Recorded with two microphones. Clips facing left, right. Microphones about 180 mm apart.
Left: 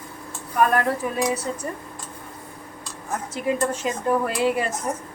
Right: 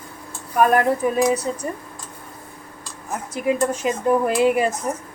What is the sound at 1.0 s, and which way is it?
Speech, 15° right (ahead or behind).